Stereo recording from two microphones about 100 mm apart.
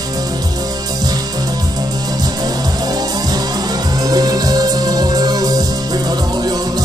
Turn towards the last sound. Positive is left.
turn(degrees=-40)  # may be behind; listen again after turning